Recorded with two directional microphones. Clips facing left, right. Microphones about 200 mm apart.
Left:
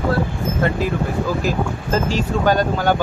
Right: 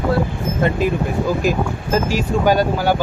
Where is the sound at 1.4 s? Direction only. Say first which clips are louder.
Right 2 dB; 15° right (ahead or behind).